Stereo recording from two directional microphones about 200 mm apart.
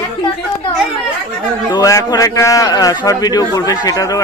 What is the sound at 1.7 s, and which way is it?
A man's voice, 15° left (ahead or behind).